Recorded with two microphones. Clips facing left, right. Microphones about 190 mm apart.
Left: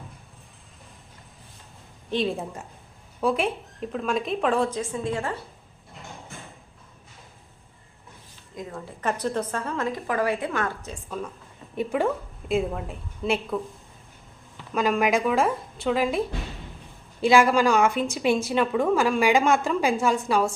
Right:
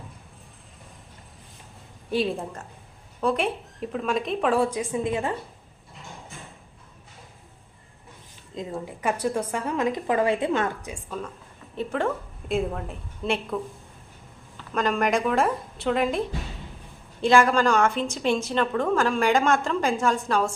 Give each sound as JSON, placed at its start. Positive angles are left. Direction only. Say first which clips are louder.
{"t": 2.0, "sound": "speech", "louder": "right 1 dB", "side_deg": -5}
{"t": 2.3, "sound": "a woman's voice", "louder": "even", "side_deg": 10}
{"t": 8.5, "sound": "a woman's voice", "louder": "right 4 dB", "side_deg": -20}
{"t": 9.0, "sound": "a woman's voice", "louder": "even", "side_deg": -10}
{"t": 11.8, "sound": "speech", "louder": "left 2 dB", "side_deg": 10}
{"t": 14.7, "sound": "a woman's voice", "louder": "left 1 dB", "side_deg": 5}